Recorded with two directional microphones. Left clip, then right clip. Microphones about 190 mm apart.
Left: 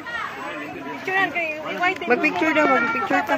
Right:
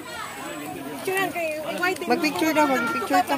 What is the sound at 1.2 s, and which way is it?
Speech, 90° right.